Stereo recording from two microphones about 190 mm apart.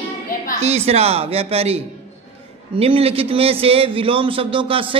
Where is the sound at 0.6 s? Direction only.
35° right (ahead or behind).